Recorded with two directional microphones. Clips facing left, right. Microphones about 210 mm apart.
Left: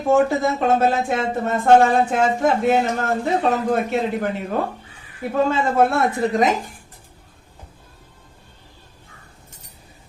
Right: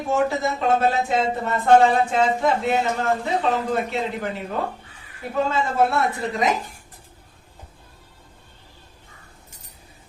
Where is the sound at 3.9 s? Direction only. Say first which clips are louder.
Left 5 dB; 50° left (ahead or behind).